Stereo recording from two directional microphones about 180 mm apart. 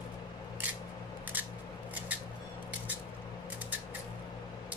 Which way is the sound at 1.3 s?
10° right (ahead or behind).